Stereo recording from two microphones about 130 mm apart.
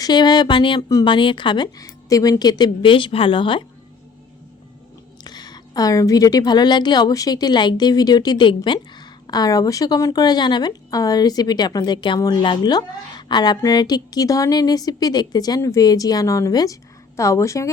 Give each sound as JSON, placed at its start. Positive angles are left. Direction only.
{"t": 0.0, "sound": "a woman's voice", "side_deg": 35}
{"t": 5.2, "sound": "a woman's voice", "side_deg": 30}